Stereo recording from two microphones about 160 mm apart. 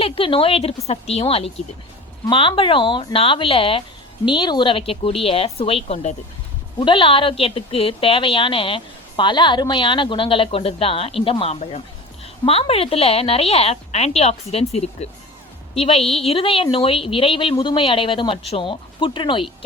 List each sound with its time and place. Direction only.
0.0 s a woman's voice: 35° left (ahead or behind)
6.7 s a woman's voice: 30° left (ahead or behind)